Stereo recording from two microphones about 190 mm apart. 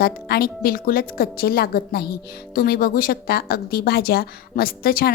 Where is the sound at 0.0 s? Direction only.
55° left (ahead or behind).